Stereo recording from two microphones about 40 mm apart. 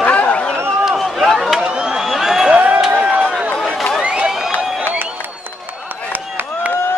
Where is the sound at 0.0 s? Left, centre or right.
Left.